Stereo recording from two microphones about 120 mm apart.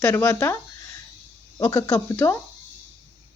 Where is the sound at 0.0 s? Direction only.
25° left (ahead or behind).